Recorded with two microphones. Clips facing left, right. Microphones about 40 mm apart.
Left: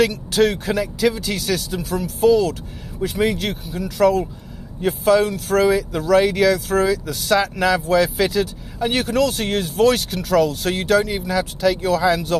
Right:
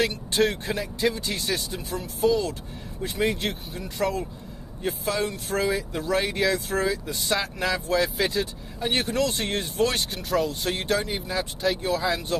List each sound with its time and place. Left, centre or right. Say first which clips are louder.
0.3 s speech: left 6 dB; left
3.0 s speech: left 5 dB; left
3.8 s speech: left 10 dB; left